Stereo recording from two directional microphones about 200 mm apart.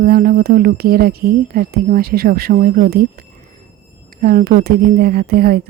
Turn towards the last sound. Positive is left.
turn(degrees=-50)  # may be behind; listen again after turning